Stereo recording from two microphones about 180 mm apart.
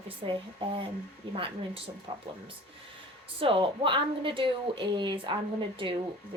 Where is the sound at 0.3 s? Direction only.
30° right (ahead or behind).